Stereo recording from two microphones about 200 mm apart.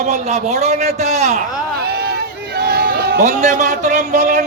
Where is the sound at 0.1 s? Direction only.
35° right (ahead or behind).